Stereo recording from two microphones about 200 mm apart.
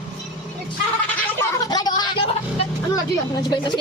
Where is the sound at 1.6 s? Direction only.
20° left (ahead or behind).